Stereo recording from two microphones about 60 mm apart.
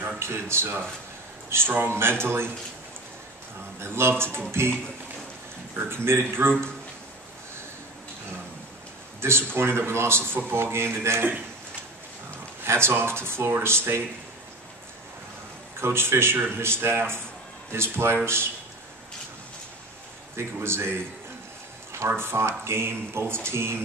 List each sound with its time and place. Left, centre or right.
0.2 s a man's voice: right
3.8 s a man's voice: right
5.8 s a man's voice: right
9.2 s a man's voice: right
12.6 s a man's voice: right
15.8 s a man's voice: right
20.3 s a man's voice: right
22.0 s a man's voice: right